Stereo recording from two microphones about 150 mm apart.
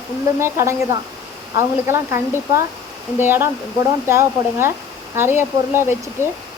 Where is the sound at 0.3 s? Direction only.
20° right (ahead or behind).